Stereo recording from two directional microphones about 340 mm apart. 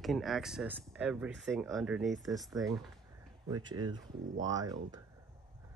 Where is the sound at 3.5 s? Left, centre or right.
Centre.